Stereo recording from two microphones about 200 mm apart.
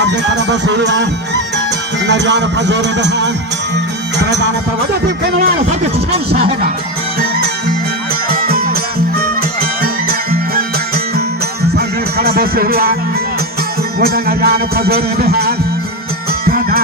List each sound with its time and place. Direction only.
0.0 s music: 60° right (ahead or behind)
2.0 s a man's voice: 60° right (ahead or behind)
8.3 s music: 50° right (ahead or behind)
14.0 s music: 50° right (ahead or behind)